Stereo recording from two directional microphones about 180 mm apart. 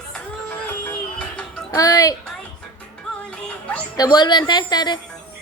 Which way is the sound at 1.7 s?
20° left (ahead or behind).